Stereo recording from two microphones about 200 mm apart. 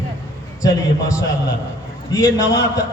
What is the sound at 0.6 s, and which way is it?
A man's voice, 15° left (ahead or behind).